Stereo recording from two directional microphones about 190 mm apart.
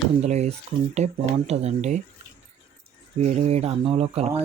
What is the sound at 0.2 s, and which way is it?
Speech, 35° right (ahead or behind).